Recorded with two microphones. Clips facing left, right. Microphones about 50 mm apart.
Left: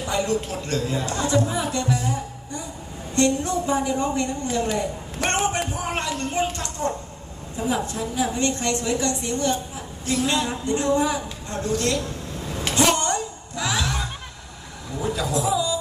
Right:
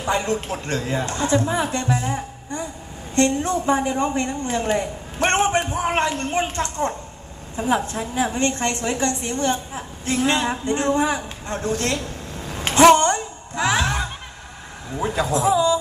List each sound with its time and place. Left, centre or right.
0.0 s a woman's voice: right
12.5 s a sound: right
14.9 s a man's voice: right